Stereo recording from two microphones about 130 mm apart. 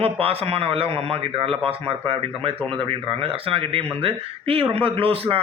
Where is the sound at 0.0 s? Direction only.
50° right (ahead or behind).